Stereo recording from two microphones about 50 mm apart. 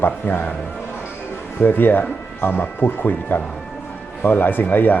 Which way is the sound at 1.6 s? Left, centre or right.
Left.